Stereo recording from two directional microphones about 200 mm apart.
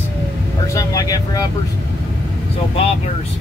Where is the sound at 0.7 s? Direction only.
15° left (ahead or behind).